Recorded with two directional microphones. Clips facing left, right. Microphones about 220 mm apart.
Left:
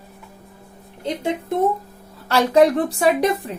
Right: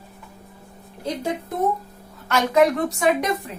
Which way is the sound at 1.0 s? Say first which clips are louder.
Left 2 dB; 25° left (ahead or behind).